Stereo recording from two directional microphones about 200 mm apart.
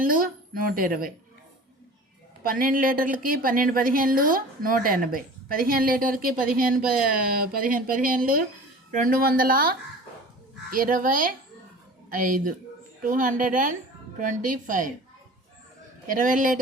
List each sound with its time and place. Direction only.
0.0 s a woman's voice: 45° right (ahead or behind)
2.4 s a woman's voice: 45° right (ahead or behind)
16.0 s a woman's voice: 40° right (ahead or behind)